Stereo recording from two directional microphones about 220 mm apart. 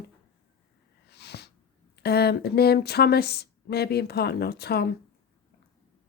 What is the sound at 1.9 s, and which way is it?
A woman's voice, 45° left (ahead or behind).